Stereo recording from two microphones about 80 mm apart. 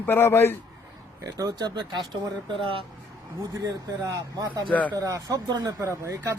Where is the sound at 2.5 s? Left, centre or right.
Right.